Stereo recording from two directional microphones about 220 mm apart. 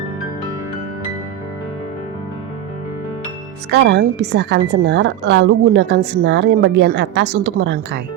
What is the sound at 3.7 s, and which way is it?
Speech, 55° right (ahead or behind).